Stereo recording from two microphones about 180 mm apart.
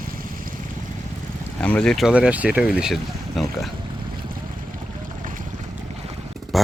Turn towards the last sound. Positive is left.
turn(degrees=0)  # may be behind; listen again after turning